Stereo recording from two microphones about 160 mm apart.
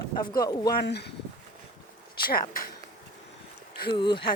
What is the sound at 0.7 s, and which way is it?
Speech, 90° left.